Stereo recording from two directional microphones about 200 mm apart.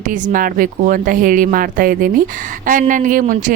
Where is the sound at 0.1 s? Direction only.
40° right (ahead or behind).